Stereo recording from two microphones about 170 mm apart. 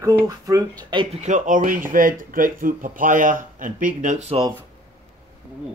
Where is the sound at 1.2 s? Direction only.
50° right (ahead or behind).